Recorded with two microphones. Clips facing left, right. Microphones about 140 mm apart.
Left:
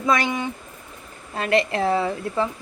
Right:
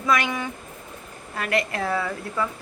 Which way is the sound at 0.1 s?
25° left (ahead or behind).